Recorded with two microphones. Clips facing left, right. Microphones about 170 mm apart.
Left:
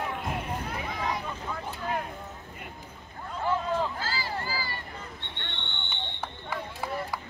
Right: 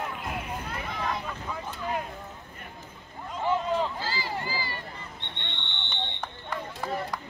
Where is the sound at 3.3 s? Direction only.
15° right (ahead or behind).